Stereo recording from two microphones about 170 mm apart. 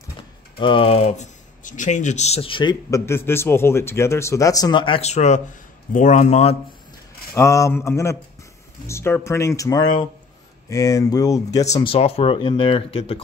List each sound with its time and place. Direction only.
0.6 s speech: 30° left (ahead or behind)
7.3 s speech: 15° left (ahead or behind)
11.8 s speech: 35° left (ahead or behind)